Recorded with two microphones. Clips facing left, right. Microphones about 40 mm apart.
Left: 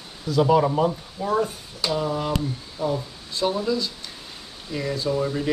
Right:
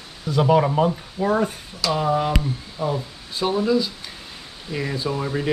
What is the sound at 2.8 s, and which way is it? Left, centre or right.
Speech, centre.